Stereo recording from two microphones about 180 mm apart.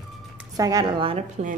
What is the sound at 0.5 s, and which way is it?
Speech, 20° right (ahead or behind).